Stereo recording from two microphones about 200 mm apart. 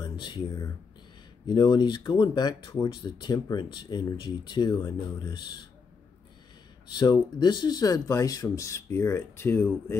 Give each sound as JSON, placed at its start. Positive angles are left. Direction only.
{"t": 0.0, "sound": "speech", "side_deg": 25}
{"t": 6.9, "sound": "speech", "side_deg": 20}